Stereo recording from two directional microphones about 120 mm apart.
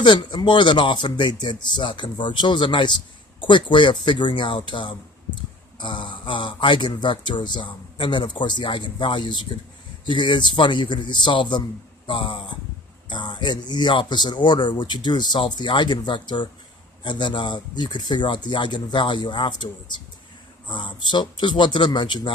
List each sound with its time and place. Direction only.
0.0 s speech: 40° left (ahead or behind)